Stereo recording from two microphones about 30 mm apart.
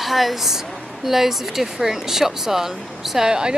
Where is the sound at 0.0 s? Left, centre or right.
Centre.